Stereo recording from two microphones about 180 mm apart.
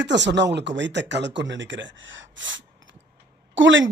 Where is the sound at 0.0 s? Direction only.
80° right.